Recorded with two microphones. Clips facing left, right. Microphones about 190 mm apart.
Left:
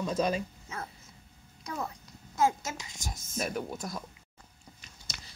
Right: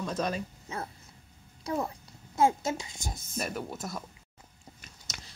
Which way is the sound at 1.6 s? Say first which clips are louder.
Right 5 dB; 30° right (ahead or behind).